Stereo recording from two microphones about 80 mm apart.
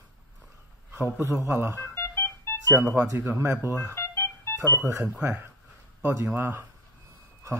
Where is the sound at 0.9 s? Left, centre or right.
Right.